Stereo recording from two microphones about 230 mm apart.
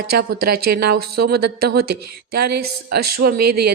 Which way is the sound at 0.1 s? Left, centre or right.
Right.